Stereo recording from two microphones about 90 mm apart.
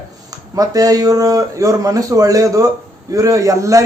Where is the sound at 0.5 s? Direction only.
40° right (ahead or behind).